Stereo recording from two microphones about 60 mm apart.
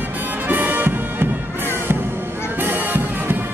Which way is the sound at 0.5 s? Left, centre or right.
Right.